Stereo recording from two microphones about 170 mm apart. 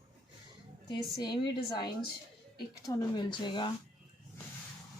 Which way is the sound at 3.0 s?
25° left (ahead or behind).